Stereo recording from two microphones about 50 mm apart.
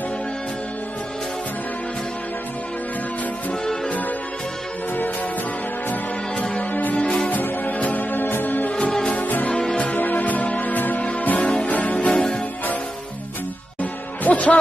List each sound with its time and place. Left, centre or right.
6.7 s music: left
7.0 s music: centre
7.2 s music: left
9.0 s music: left
9.9 s music: left
14.2 s music: left